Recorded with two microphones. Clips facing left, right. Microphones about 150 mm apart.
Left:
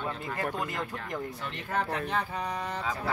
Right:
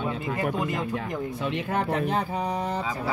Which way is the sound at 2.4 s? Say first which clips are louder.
Right 6 dB; 20° right (ahead or behind).